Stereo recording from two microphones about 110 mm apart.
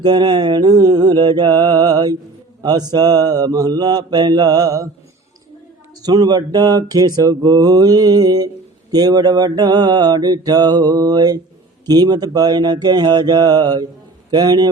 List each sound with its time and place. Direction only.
0.0 s mantra: 40° right (ahead or behind)
6.0 s mantra: 35° right (ahead or behind)
14.3 s a man's voice: 40° right (ahead or behind)